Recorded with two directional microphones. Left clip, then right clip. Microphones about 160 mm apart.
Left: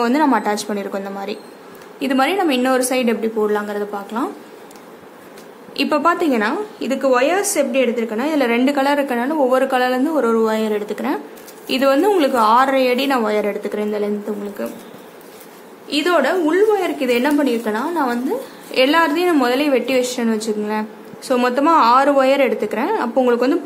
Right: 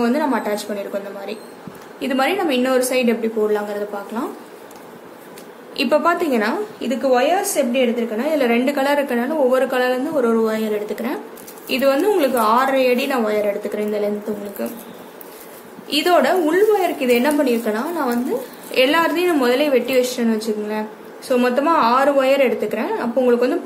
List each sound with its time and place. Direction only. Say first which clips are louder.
0.0 s a woman's voice: left 3 dB; 40° left (ahead or behind)
5.8 s a woman's voice: even; 30° left (ahead or behind)
15.9 s a woman's voice: right 1 dB; 15° left (ahead or behind); by 23.6 s 35° left (ahead or behind)